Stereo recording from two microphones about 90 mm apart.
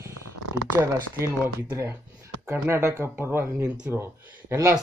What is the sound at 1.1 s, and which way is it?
Speech, 30° right (ahead or behind).